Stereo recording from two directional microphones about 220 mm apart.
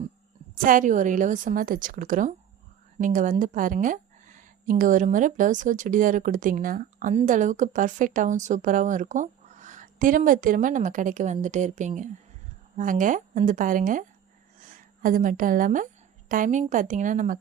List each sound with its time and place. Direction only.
0.6 s speech: 40° right (ahead or behind)